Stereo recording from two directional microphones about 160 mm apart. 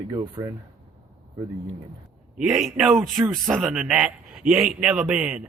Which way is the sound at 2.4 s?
5° right (ahead or behind).